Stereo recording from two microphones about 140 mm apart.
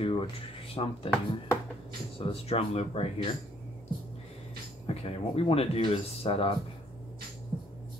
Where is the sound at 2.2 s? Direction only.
45° left (ahead or behind).